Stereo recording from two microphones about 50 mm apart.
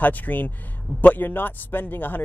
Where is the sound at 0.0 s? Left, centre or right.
Left.